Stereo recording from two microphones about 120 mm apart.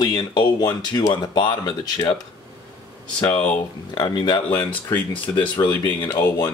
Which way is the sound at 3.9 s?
35° left (ahead or behind).